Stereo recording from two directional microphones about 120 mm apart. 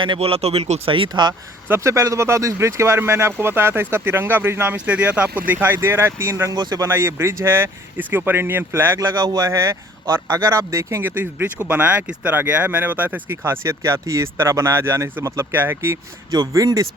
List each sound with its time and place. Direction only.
0.2 s speech: 55° right (ahead or behind); by 1.4 s 40° right (ahead or behind)
1.6 s speech: 20° right (ahead or behind)
6.8 s speech: 20° right (ahead or behind)
9.0 s speech: 35° right (ahead or behind)
9.5 s speech: 25° right (ahead or behind)